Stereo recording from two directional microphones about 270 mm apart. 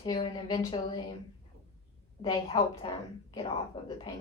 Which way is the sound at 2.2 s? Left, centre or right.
Centre.